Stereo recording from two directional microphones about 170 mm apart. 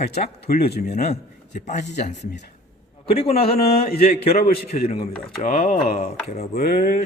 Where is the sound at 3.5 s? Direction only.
65° left (ahead or behind).